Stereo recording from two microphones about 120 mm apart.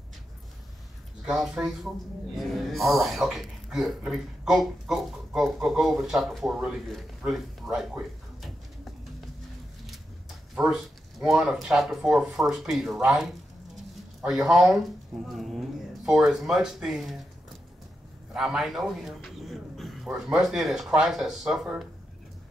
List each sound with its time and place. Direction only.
1.2 s speech: centre (ahead or behind)
10.5 s speech: 5° right (ahead or behind)
18.3 s speech: 5° right (ahead or behind)